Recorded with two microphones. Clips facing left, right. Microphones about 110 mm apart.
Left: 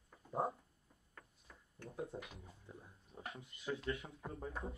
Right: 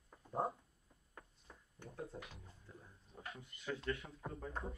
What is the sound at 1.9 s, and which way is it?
Speech, 20° left (ahead or behind).